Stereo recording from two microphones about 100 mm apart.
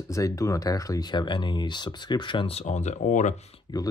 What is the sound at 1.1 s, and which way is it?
Speech, 50° left (ahead or behind).